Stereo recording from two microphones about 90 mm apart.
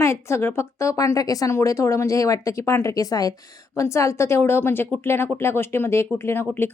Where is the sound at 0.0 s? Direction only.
30° left (ahead or behind).